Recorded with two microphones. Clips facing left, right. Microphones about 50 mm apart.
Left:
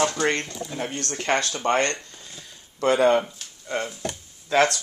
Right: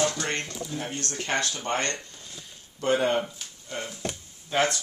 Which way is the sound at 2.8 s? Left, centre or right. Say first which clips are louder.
Left 5 dB; left.